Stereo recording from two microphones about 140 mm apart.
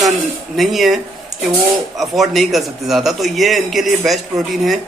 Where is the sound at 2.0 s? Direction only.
Centre (ahead or behind).